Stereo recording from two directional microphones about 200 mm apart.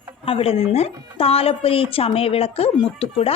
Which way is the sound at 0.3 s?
30° left (ahead or behind).